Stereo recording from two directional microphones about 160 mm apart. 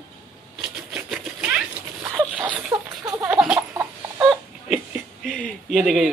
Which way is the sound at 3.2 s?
5° right (ahead or behind).